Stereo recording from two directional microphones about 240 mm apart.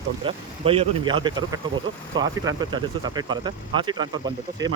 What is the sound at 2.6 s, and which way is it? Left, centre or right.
Speech, centre.